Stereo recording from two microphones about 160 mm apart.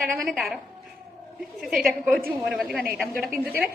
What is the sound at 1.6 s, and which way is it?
A woman's voice, centre (ahead or behind).